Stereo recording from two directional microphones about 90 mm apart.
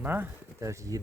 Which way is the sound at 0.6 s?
35° right (ahead or behind).